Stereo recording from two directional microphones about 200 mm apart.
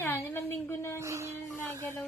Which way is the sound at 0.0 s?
10° left (ahead or behind).